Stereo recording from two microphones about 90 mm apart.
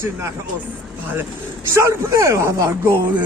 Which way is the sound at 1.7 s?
35° right (ahead or behind).